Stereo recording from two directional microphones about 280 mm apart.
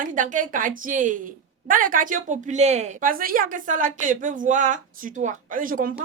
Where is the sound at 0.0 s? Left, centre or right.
Right.